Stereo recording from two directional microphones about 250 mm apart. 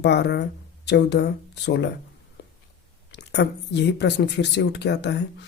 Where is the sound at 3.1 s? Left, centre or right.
Left.